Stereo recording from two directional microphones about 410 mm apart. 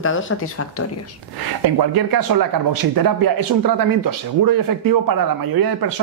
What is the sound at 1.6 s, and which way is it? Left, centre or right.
Speech, right.